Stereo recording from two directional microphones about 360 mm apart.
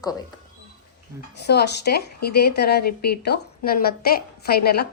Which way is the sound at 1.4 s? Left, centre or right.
Left.